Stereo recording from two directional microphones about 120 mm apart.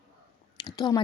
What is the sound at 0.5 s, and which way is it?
Speech, 35° left (ahead or behind).